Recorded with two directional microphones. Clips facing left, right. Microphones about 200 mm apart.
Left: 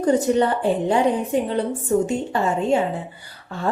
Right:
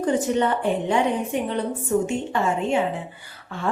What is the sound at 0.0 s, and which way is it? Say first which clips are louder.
A woman's voice: left 3 dB; 35° left (ahead or behind).